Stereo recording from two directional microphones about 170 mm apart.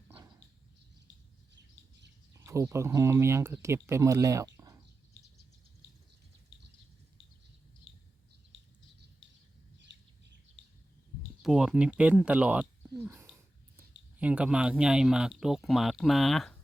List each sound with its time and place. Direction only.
2.3 s speech: 20° right (ahead or behind)
11.4 s speech: 5° right (ahead or behind)